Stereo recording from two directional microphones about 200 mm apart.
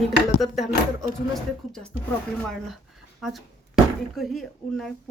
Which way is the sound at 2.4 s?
5° left (ahead or behind).